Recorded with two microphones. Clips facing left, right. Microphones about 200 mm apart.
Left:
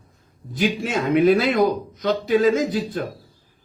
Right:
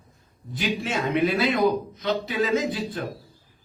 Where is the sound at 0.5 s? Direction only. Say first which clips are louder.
Left 5 dB; 45° left (ahead or behind).